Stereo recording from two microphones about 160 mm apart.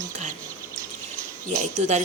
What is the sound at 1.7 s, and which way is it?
Speech, 50° right (ahead or behind).